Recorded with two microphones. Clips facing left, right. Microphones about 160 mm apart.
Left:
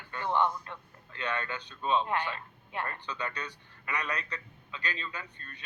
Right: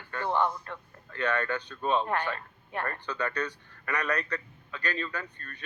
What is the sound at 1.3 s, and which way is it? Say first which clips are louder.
Speech: right 6 dB; 45° right (ahead or behind).